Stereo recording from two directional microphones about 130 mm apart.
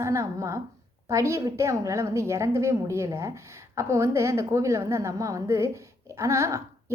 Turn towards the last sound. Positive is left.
turn(degrees=-20)  # may be behind; listen again after turning